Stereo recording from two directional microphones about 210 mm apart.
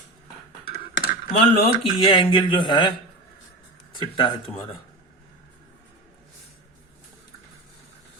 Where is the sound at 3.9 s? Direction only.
20° left (ahead or behind).